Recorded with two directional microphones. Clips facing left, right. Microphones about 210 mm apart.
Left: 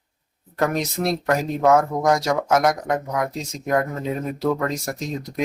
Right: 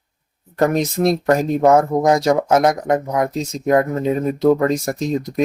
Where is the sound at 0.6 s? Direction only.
20° right (ahead or behind).